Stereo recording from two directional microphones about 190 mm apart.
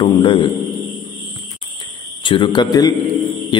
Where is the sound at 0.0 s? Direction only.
25° left (ahead or behind).